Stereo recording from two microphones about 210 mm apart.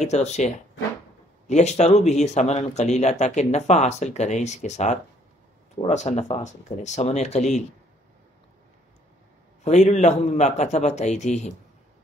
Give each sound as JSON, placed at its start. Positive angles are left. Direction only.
{"t": 0.0, "sound": "speech", "side_deg": 30}
{"t": 1.5, "sound": "speech", "side_deg": 30}
{"t": 9.6, "sound": "speech", "side_deg": 35}